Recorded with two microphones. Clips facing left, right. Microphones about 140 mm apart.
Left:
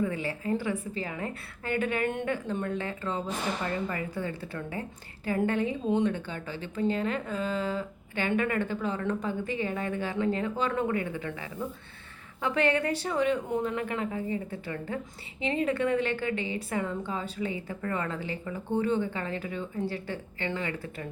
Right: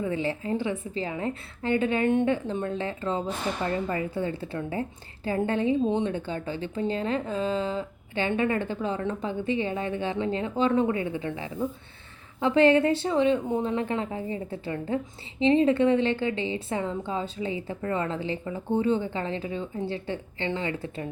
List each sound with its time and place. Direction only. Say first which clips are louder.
0.0 s a woman's voice: right 2 dB; 25° right (ahead or behind)